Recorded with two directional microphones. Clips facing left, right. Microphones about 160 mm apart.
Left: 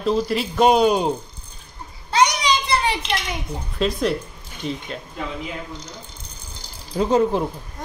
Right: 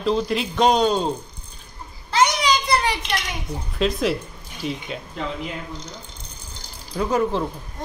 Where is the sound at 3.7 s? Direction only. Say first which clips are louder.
Even; centre (ahead or behind).